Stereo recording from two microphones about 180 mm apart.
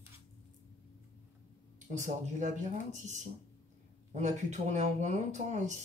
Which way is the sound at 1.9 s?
40° right (ahead or behind).